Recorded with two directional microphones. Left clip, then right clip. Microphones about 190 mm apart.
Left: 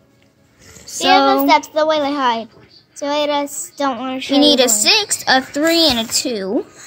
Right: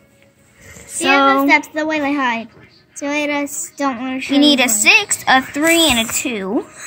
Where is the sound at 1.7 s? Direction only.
25° left (ahead or behind).